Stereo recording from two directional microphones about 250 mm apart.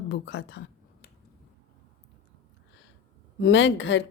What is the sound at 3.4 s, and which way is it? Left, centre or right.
Speech, left.